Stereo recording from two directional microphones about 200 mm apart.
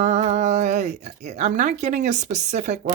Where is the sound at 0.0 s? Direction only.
35° right (ahead or behind).